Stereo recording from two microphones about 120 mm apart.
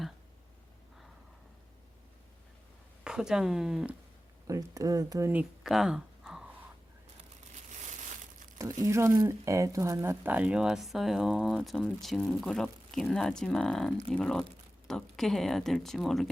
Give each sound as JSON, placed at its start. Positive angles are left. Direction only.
{"t": 3.0, "sound": "speech", "side_deg": -5}
{"t": 4.4, "sound": "speech", "side_deg": -30}
{"t": 5.3, "sound": "speech", "side_deg": -10}
{"t": 5.7, "sound": "a sound", "side_deg": -5}
{"t": 7.8, "sound": "crumpling", "side_deg": -85}
{"t": 8.8, "sound": "speech", "side_deg": -25}